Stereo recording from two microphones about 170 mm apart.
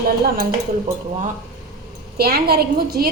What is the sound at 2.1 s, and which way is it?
Speech, 65° right (ahead or behind).